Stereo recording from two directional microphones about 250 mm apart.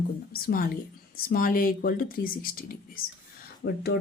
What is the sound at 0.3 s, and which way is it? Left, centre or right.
Speech, left.